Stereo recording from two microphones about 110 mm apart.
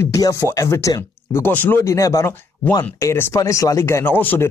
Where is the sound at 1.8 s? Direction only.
30° left (ahead or behind).